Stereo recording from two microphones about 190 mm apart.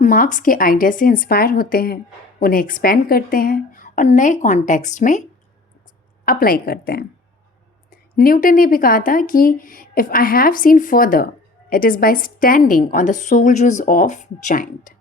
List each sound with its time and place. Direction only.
0.0 s speech: 40° left (ahead or behind)
6.2 s speech: 50° left (ahead or behind)